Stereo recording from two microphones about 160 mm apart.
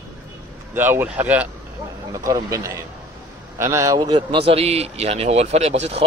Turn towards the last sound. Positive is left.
turn(degrees=-40)  # may be behind; listen again after turning